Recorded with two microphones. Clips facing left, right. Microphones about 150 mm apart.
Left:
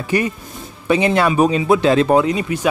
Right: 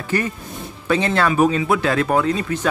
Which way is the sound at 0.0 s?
15° left (ahead or behind).